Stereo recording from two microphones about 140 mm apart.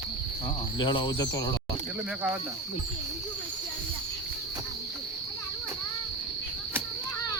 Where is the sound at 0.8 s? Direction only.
30° left (ahead or behind).